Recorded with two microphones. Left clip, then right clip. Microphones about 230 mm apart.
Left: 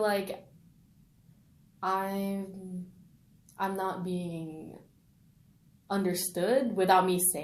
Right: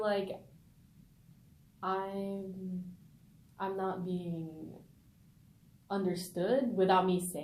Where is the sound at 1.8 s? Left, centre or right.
Left.